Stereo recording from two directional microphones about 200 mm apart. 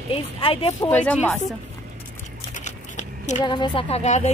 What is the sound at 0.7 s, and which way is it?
Speech, 10° left (ahead or behind).